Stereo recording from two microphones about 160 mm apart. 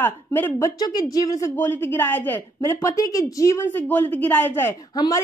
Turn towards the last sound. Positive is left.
turn(degrees=25)  # may be behind; listen again after turning